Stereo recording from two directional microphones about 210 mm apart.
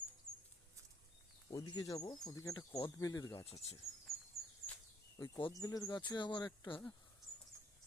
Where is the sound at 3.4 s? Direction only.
30° left (ahead or behind).